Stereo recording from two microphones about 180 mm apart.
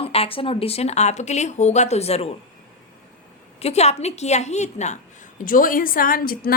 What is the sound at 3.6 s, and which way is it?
A woman's voice, 35° left (ahead or behind).